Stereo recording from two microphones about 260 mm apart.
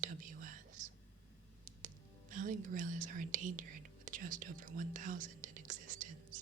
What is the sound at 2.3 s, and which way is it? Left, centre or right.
Speech, right.